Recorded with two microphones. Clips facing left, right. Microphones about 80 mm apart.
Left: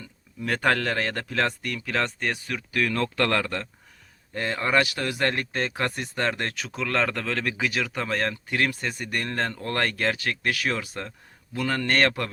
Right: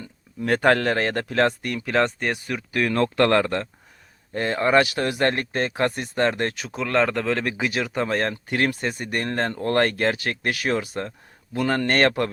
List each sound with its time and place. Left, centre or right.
0.0 s speech: right
5.0 s speech: right
8.4 s speech: right
8.8 s speech: right
9.2 s speech: right